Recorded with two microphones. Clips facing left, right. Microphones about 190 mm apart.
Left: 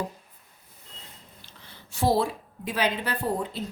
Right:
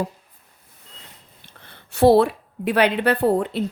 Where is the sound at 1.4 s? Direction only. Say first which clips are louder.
Right 1 dB; 55° right (ahead or behind).